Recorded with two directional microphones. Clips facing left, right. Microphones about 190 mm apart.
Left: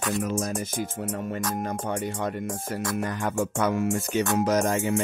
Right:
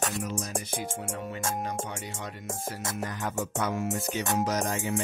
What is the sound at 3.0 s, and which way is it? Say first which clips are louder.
Speech: left 5 dB; 65° left (ahead or behind).